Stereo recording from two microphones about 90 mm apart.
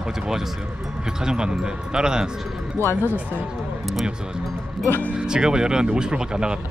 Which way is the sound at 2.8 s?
30° left (ahead or behind).